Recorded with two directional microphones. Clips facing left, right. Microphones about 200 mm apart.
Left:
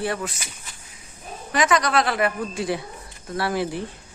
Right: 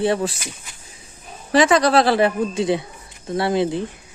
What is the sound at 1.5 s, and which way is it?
A woman's voice, 30° right (ahead or behind).